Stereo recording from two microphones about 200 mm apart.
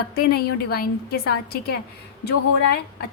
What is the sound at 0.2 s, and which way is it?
A woman's voice, 50° left (ahead or behind).